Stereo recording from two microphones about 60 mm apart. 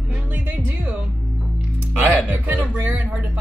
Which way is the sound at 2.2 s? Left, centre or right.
Right.